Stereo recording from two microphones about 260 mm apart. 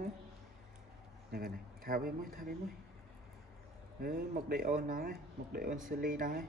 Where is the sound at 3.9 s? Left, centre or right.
Right.